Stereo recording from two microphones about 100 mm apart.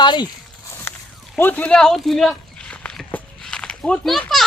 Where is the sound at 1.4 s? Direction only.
15° left (ahead or behind).